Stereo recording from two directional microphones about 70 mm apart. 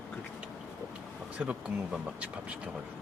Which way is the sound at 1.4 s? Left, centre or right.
Centre.